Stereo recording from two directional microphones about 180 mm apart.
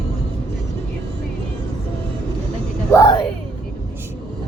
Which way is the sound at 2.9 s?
25° left (ahead or behind).